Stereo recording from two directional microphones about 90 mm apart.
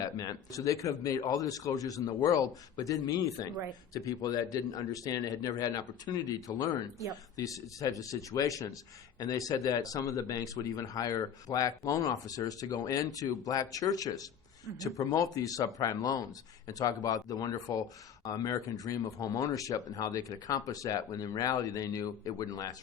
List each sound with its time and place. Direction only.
0.0 s a man's voice: 45° left (ahead or behind)